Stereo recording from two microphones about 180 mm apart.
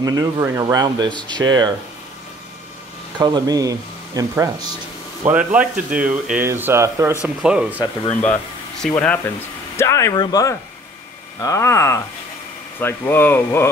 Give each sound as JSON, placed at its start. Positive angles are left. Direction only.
{"t": 0.0, "sound": "speech", "side_deg": -20}
{"t": 3.2, "sound": "speech", "side_deg": -25}
{"t": 5.2, "sound": "speech", "side_deg": -10}
{"t": 8.2, "sound": "speech", "side_deg": 5}